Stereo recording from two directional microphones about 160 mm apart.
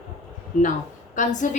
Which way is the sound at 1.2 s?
50° left (ahead or behind).